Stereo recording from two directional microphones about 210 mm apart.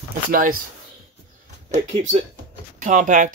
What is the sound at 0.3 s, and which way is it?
Speech, 45° right (ahead or behind).